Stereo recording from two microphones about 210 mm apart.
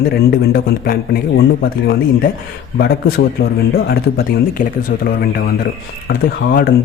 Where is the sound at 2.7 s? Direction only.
45° left (ahead or behind).